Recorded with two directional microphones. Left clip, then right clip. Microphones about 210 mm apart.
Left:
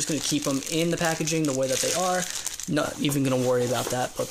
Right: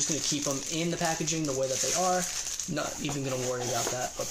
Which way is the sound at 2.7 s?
45° left (ahead or behind).